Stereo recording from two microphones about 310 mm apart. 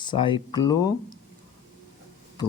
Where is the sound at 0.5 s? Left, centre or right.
Centre.